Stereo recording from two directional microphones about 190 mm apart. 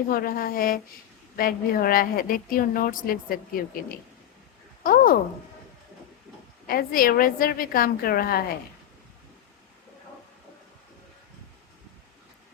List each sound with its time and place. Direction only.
0.1 s a woman's voice: 50° left (ahead or behind)
6.7 s a woman's voice: 50° left (ahead or behind)